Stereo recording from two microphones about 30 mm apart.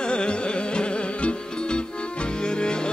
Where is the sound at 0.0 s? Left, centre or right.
Left.